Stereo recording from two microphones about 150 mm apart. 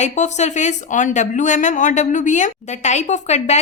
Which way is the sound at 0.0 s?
50° left (ahead or behind).